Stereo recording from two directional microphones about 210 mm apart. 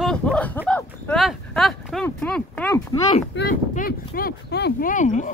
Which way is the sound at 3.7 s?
45° left (ahead or behind).